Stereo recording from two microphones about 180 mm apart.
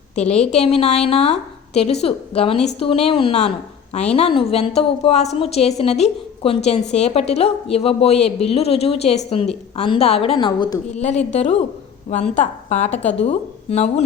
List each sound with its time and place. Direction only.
0.5 s a woman's voice: 35° left (ahead or behind)
10.9 s a woman's voice: 40° left (ahead or behind)
12.9 s speech: 10° left (ahead or behind)
13.2 s speech: 35° left (ahead or behind)